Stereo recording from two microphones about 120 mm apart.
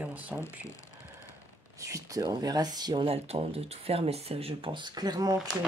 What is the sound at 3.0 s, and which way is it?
Speech, 55° right (ahead or behind).